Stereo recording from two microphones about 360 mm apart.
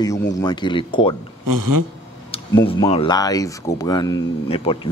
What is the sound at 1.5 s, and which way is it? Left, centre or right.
Speech, right.